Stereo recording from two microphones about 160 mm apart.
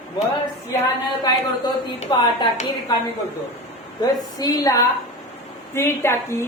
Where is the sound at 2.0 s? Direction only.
40° left (ahead or behind).